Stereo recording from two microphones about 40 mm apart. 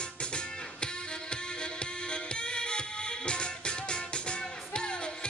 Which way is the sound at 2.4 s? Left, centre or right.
Left.